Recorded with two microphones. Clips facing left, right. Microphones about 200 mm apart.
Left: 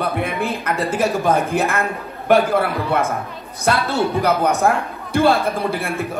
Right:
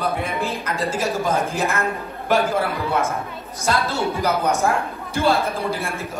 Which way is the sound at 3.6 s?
60° left (ahead or behind).